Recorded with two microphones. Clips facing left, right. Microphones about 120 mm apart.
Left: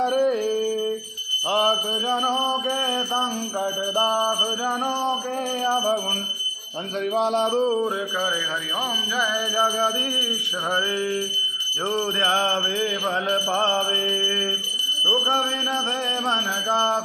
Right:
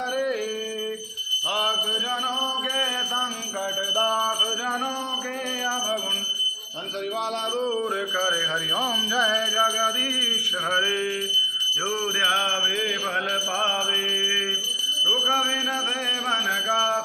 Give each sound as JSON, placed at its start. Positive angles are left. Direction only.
{"t": 0.0, "sound": "music", "side_deg": 40}
{"t": 1.5, "sound": "alarm", "side_deg": 30}
{"t": 3.9, "sound": "mantra", "side_deg": 20}
{"t": 7.2, "sound": "music", "side_deg": 35}
{"t": 10.9, "sound": "mantra", "side_deg": 20}
{"t": 16.7, "sound": "mantra", "side_deg": 25}